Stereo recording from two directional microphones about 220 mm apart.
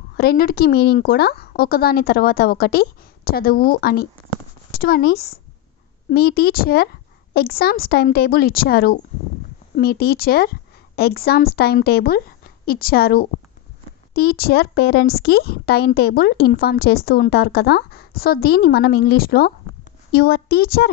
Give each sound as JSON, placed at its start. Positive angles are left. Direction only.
{"t": 0.2, "sound": "speech", "side_deg": 45}